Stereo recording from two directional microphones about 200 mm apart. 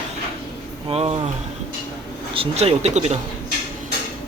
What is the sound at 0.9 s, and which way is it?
Speech, 30° right (ahead or behind).